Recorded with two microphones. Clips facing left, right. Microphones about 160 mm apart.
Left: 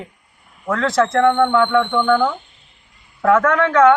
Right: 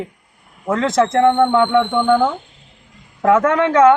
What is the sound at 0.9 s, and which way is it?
Speech, 20° right (ahead or behind).